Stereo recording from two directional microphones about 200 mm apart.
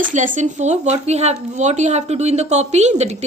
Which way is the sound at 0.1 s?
40° right (ahead or behind).